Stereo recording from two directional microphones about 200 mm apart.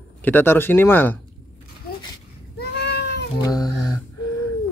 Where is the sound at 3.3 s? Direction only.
20° left (ahead or behind).